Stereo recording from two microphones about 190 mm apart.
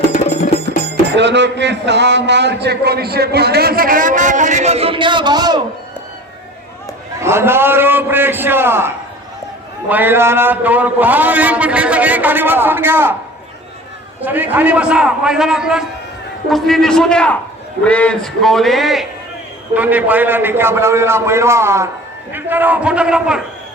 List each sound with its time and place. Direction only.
0.1 s music: 40° left (ahead or behind)
1.1 s a man's voice: 65° right (ahead or behind); by 5.6 s 20° right (ahead or behind)
7.2 s a man's voice: 15° right (ahead or behind)
14.2 s a man's voice: 10° right (ahead or behind)